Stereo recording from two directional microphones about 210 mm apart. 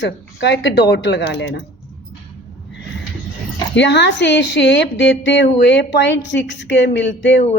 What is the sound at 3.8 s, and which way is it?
A woman's voice, 55° left (ahead or behind).